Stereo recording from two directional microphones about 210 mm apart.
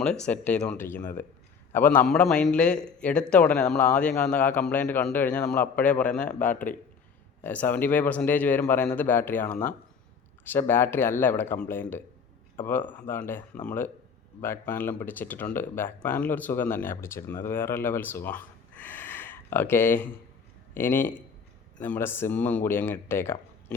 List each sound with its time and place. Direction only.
0.0 s a man's voice: 5° left (ahead or behind)